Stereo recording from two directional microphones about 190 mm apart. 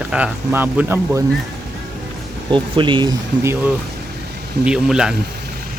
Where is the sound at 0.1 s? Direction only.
10° right (ahead or behind).